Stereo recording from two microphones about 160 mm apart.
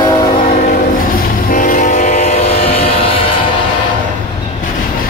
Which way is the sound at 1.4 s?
55° left (ahead or behind).